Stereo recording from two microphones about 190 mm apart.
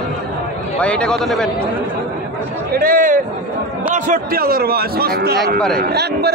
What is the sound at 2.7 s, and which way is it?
A man's voice, 50° right (ahead or behind).